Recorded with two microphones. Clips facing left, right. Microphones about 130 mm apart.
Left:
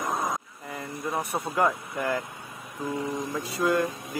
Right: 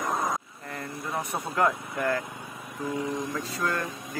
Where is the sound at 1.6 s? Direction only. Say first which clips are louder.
Right 3 dB; 15° left (ahead or behind).